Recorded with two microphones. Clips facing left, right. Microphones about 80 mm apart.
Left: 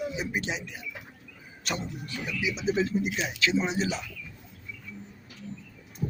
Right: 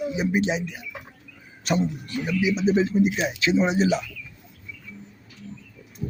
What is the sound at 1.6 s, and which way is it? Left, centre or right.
Speech, right.